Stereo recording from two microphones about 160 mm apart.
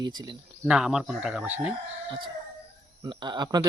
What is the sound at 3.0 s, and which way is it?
Speech, 30° right (ahead or behind).